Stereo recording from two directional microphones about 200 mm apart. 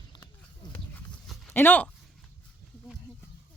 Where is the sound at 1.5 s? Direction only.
10° left (ahead or behind).